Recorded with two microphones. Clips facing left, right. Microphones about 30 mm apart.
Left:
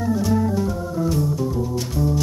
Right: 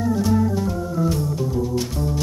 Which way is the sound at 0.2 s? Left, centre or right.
Centre.